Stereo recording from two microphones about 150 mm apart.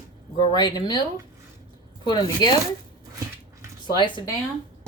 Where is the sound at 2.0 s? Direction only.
30° left (ahead or behind).